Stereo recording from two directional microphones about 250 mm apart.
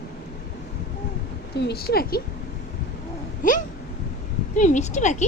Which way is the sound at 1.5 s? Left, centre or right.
Left.